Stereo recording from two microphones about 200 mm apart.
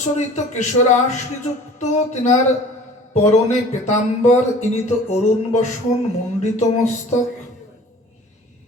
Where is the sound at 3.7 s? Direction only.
35° left (ahead or behind).